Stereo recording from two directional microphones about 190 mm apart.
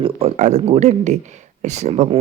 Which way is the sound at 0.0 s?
30° right (ahead or behind).